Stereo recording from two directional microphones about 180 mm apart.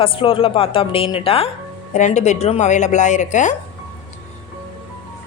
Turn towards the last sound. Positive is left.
turn(degrees=45)  # may be behind; listen again after turning